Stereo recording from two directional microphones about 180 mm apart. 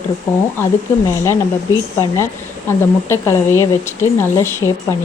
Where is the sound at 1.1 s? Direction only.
15° left (ahead or behind).